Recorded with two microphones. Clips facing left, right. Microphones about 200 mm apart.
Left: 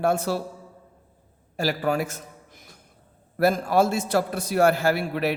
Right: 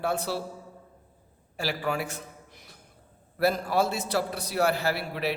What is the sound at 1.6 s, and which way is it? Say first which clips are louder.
A man's voice: left 5 dB; 40° left (ahead or behind).